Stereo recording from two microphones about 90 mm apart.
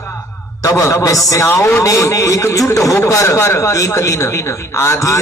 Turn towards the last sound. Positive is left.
turn(degrees=35)  # may be behind; listen again after turning